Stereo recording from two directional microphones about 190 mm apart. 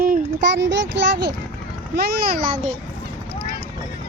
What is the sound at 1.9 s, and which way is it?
Speech, 50° right (ahead or behind).